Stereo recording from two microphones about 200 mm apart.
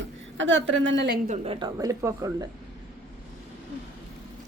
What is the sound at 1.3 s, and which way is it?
Speech, 30° right (ahead or behind).